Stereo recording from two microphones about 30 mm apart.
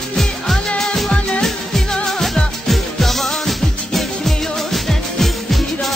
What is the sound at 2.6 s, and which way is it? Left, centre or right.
Music, centre.